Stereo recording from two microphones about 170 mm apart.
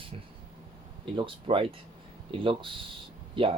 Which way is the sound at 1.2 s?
30° right (ahead or behind).